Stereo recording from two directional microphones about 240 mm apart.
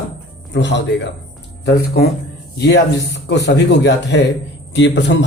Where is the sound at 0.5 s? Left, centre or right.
Left.